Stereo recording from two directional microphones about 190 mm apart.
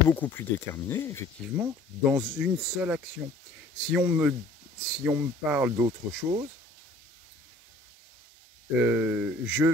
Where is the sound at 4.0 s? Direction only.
10° right (ahead or behind).